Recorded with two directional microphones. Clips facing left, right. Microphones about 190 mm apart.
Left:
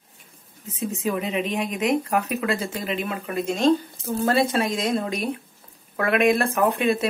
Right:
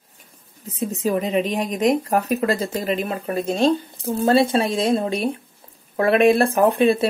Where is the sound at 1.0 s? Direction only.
35° right (ahead or behind).